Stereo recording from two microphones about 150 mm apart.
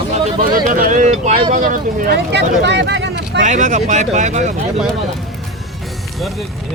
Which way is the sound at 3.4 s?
55° right (ahead or behind).